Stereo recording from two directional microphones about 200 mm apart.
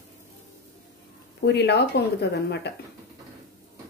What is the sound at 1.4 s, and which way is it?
Speech, 55° left (ahead or behind).